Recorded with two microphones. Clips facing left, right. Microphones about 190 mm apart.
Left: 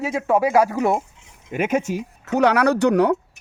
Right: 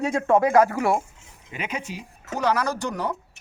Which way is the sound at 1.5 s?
50° left (ahead or behind).